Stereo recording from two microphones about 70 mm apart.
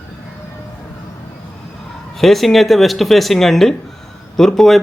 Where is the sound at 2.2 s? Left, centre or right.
Centre.